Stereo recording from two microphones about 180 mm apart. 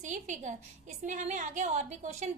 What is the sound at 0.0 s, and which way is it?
A woman's voice, 45° right (ahead or behind).